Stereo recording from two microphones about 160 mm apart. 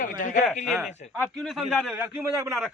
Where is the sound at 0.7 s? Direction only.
Centre (ahead or behind); by 2.6 s 20° right (ahead or behind).